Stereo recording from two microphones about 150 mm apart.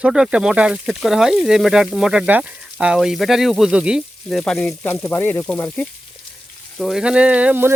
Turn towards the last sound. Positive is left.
turn(degrees=-10)  # may be behind; listen again after turning